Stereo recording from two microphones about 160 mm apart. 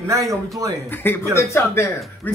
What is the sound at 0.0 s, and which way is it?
Speech, 20° right (ahead or behind).